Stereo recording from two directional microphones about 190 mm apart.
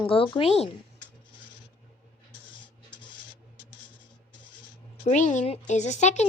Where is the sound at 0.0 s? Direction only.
25° left (ahead or behind).